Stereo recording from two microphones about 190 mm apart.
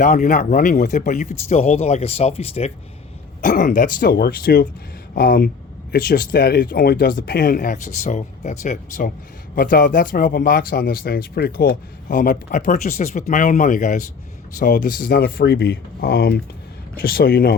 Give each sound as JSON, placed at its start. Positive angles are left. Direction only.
{"t": 0.0, "sound": "speech", "side_deg": 45}
{"t": 3.4, "sound": "speech", "side_deg": 45}